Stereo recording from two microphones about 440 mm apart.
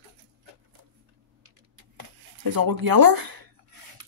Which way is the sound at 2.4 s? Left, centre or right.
Right.